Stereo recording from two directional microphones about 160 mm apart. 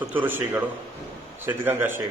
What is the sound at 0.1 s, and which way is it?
A man's voice, 10° right (ahead or behind).